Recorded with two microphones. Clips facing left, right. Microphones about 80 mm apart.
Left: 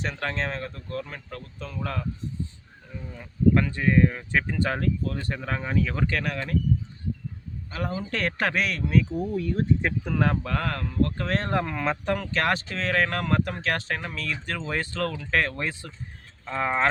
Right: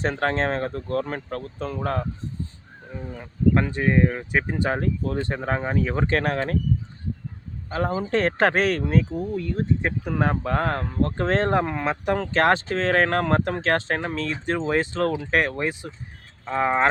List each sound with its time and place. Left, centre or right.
0.0 s speech: right
3.5 s speech: right
7.7 s speech: right
9.1 s speech: centre
9.6 s speech: centre
12.1 s speech: right